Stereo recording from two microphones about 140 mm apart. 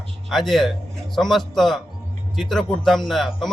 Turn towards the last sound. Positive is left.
turn(degrees=0)  # may be behind; listen again after turning